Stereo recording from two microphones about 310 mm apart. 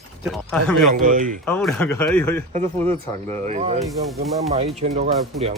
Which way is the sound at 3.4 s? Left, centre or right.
Right.